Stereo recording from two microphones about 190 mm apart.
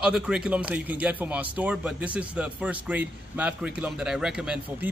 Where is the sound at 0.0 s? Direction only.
5° right (ahead or behind).